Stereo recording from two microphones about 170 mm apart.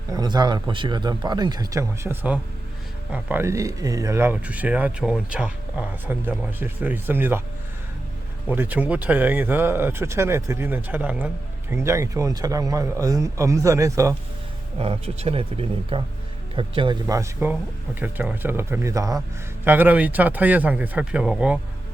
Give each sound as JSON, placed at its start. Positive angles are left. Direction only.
{"t": 0.1, "sound": "speech", "side_deg": -25}
{"t": 8.4, "sound": "speech", "side_deg": -10}
{"t": 14.8, "sound": "speech", "side_deg": -35}